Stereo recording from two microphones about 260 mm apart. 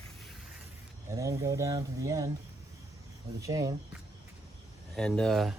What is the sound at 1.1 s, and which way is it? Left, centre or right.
Speech, centre.